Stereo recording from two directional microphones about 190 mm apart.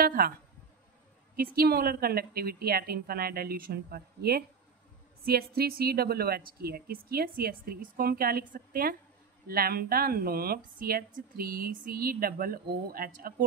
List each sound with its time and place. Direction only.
0.0 s speech: 50° right (ahead or behind)
1.3 s a woman's voice: 50° right (ahead or behind)